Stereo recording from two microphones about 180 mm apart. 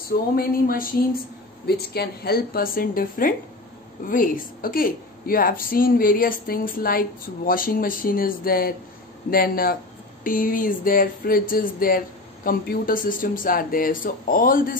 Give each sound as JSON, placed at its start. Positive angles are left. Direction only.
{"t": 0.4, "sound": "a woman's voice", "side_deg": 55}